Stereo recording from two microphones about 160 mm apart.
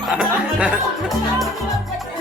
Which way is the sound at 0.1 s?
5° right (ahead or behind).